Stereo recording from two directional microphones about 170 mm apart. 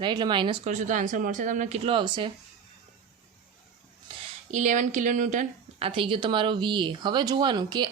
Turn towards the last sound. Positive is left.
turn(degrees=-25)  # may be behind; listen again after turning